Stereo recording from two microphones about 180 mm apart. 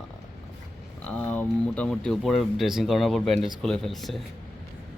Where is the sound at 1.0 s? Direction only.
10° left (ahead or behind).